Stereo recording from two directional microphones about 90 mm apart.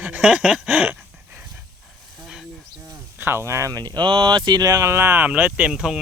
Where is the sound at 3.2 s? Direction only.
25° right (ahead or behind).